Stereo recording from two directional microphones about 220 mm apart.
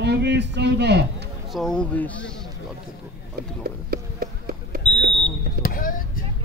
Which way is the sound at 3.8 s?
40° right (ahead or behind).